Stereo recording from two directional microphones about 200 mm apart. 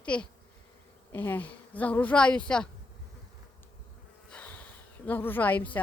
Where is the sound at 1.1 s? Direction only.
10° left (ahead or behind).